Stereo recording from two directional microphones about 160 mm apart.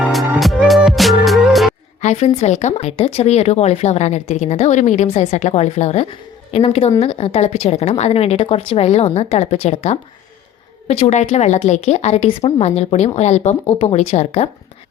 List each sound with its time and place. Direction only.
0.0 s music: centre (ahead or behind)
2.0 s speech: 45° left (ahead or behind)